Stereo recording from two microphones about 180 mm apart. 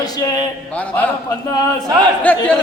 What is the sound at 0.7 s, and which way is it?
Speech, 5° left (ahead or behind).